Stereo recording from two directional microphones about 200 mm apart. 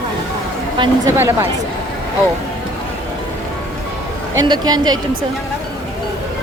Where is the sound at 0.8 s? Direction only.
15° right (ahead or behind).